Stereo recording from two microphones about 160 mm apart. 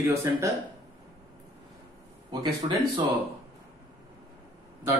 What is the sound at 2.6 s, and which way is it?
Speech, 25° right (ahead or behind).